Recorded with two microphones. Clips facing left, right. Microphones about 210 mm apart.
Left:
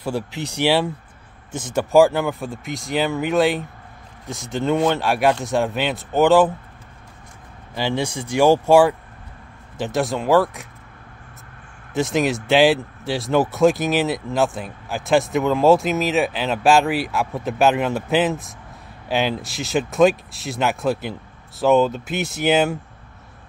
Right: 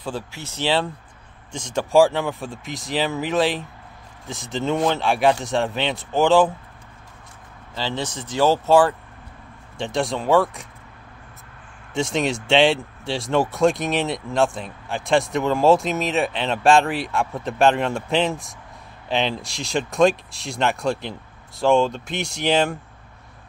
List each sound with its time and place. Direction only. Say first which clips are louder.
0.0 s speech: left 5 dB; 15° left (ahead or behind)
7.7 s speech: left 4 dB; 15° left (ahead or behind)
11.9 s speech: left 3 dB; centre (ahead or behind)